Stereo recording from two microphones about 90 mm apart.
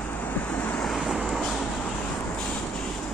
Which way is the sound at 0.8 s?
5° left (ahead or behind).